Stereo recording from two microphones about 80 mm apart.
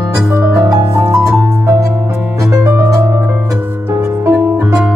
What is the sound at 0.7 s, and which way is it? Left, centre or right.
Music, right.